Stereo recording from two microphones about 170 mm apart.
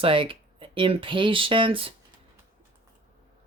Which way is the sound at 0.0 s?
30° right (ahead or behind).